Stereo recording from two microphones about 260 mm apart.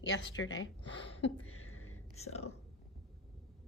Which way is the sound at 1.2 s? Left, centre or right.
Left.